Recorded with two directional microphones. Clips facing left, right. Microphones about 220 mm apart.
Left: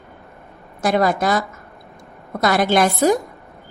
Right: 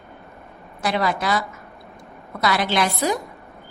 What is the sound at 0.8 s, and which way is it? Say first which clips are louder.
A woman's voice: left 5 dB; 45° left (ahead or behind).